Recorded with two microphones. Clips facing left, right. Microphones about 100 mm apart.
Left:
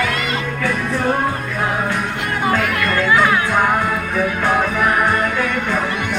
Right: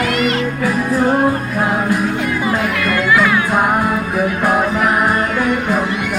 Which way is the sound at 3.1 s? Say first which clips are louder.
Right 1 dB; 30° left (ahead or behind).